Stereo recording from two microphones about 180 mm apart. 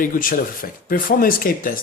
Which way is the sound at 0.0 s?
50° left (ahead or behind).